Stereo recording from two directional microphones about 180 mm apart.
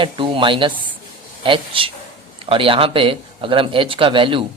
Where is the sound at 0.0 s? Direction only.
30° right (ahead or behind).